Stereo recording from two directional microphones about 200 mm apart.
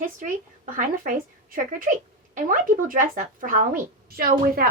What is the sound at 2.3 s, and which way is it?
A woman's voice, 40° right (ahead or behind).